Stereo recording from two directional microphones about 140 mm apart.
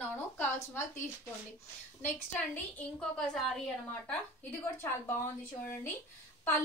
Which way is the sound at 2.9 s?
5° left (ahead or behind).